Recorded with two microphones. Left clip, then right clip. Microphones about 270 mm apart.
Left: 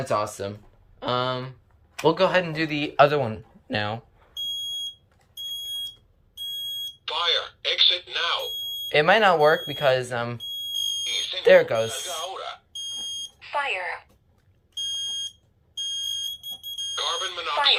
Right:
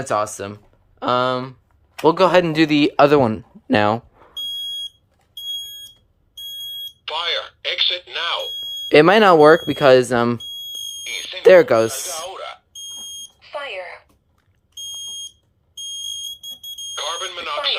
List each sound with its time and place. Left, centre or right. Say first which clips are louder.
0.0 s speech: right 4 dB; centre
7.0 s alarm: right 1 dB; centre
8.9 s speech: right 7 dB; right
11.0 s speech: right 8 dB; centre
12.0 s a sound: right 2 dB; centre
13.4 s smoke detector: left 2 dB; centre
16.9 s a sound: right 2 dB; centre